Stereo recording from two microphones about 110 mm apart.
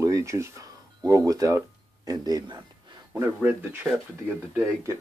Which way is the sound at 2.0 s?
35° right (ahead or behind).